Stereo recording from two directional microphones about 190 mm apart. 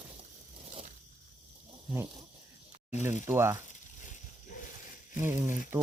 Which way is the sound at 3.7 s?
40° left (ahead or behind).